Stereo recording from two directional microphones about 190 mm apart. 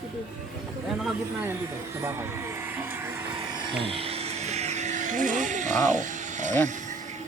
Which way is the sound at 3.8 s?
30° right (ahead or behind).